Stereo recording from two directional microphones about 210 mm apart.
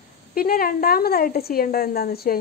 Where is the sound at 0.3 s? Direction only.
45° left (ahead or behind).